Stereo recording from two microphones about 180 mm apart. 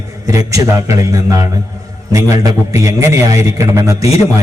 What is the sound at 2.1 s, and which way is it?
A man's voice, 15° right (ahead or behind).